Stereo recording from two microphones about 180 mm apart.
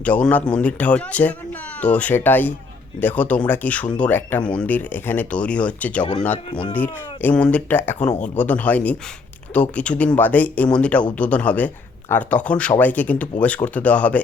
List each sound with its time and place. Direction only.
0.0 s speech: 10° left (ahead or behind)
6.5 s speech: 25° left (ahead or behind)
6.7 s speech: 10° left (ahead or behind)
7.9 s speech: 40° left (ahead or behind)
8.4 s speech: 10° left (ahead or behind)